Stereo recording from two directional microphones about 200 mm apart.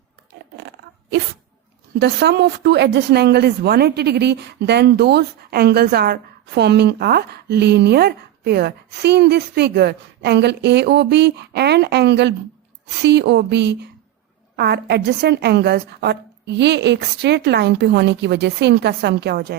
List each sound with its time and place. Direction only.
2.0 s a woman's voice: 60° right (ahead or behind)